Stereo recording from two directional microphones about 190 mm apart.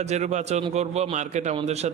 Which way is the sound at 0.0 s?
35° right (ahead or behind).